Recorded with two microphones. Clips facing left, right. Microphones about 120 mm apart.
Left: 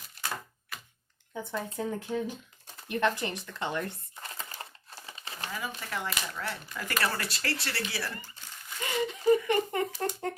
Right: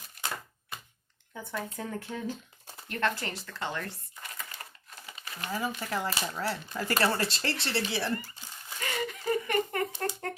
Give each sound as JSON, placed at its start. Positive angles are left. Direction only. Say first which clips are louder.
{"t": 1.3, "sound": "speech", "louder": "left 2 dB", "side_deg": 20}
{"t": 2.9, "sound": "a sound", "louder": "left 3 dB", "side_deg": 15}
{"t": 5.5, "sound": "speech", "louder": "right 5 dB", "side_deg": -35}
{"t": 8.8, "sound": "speech", "louder": "left 4 dB", "side_deg": 20}